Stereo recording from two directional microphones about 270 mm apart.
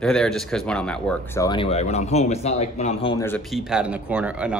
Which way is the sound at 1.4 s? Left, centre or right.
Centre.